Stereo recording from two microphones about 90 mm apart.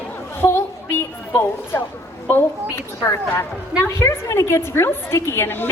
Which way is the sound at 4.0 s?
35° left (ahead or behind).